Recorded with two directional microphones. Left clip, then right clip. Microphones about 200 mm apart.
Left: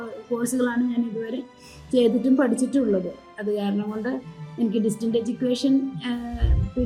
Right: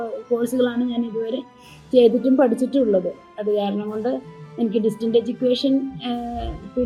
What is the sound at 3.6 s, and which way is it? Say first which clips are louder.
A woman's voice: right 5 dB; centre (ahead or behind).